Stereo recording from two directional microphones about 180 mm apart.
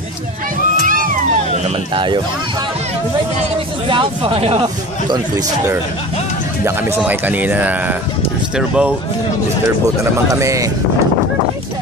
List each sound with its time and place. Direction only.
0.8 s music: 50° right (ahead or behind)
2.0 s speech: 25° right (ahead or behind)
3.8 s speech: 30° right (ahead or behind)
6.6 s speech: 10° right (ahead or behind)
10.3 s speech: 15° right (ahead or behind)